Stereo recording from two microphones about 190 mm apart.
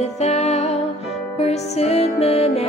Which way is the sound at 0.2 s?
35° left (ahead or behind).